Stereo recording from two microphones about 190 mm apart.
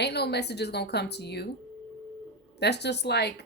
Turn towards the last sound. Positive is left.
turn(degrees=60)  # may be behind; listen again after turning